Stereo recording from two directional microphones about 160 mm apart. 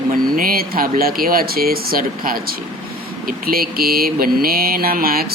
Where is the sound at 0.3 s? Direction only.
65° right (ahead or behind).